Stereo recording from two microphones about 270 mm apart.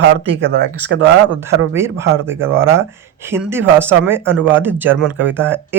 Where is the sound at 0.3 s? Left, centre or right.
Right.